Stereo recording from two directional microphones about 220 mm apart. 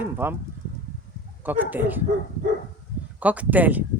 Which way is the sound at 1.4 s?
10° right (ahead or behind).